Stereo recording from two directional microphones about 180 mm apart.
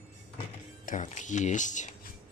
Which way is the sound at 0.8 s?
45° left (ahead or behind).